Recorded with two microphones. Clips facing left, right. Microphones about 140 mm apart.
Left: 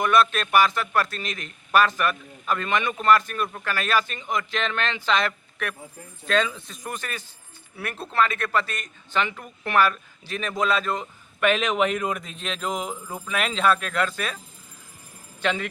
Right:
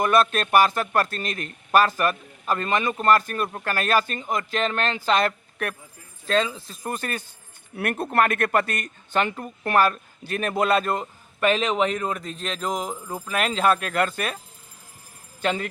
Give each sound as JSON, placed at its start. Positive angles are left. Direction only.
{"t": 0.0, "sound": "a man's voice", "side_deg": -45}
{"t": 6.2, "sound": "speech", "side_deg": -30}
{"t": 7.8, "sound": "a man's voice", "side_deg": -55}
{"t": 9.3, "sound": "a man's voice", "side_deg": -40}
{"t": 11.3, "sound": "speech", "side_deg": -35}
{"t": 11.9, "sound": "a man's voice", "side_deg": 10}
{"t": 13.1, "sound": "speech", "side_deg": -10}
{"t": 13.6, "sound": "a man's voice", "side_deg": -45}
{"t": 15.4, "sound": "speech", "side_deg": -40}